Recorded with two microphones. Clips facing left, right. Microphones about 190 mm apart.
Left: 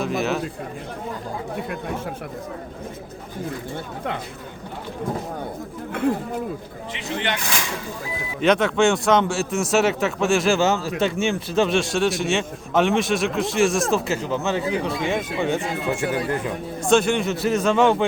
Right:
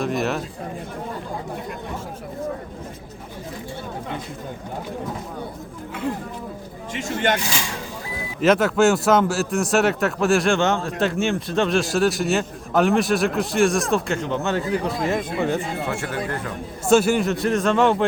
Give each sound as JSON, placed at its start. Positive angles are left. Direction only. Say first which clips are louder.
{"t": 0.0, "sound": "a man's voice", "louder": "even", "side_deg": 0}
{"t": 6.9, "sound": "speech", "louder": "right 4 dB", "side_deg": -45}
{"t": 8.4, "sound": "a man's voice", "louder": "right 1 dB", "side_deg": -5}
{"t": 15.9, "sound": "speech", "louder": "left 7 dB", "side_deg": 15}
{"t": 16.8, "sound": "a man's voice", "louder": "right 2 dB", "side_deg": -5}